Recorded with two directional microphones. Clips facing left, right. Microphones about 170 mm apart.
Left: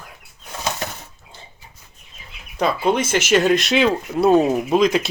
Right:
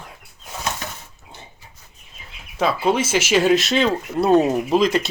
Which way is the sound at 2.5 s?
5° right (ahead or behind).